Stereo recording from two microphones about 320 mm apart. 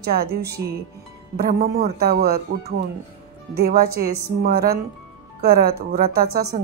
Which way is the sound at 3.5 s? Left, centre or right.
Right.